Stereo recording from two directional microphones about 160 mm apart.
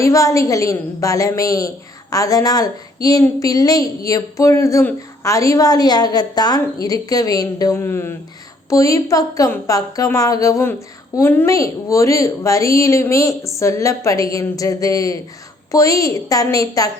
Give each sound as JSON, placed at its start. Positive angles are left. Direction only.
{"t": 0.0, "sound": "a woman's voice", "side_deg": 20}